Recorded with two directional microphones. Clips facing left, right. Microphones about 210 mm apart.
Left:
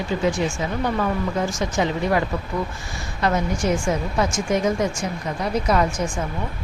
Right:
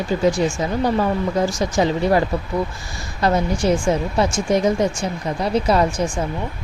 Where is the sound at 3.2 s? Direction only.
35° right (ahead or behind).